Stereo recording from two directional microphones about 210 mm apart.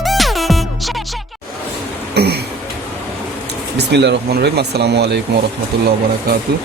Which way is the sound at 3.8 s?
55° right (ahead or behind).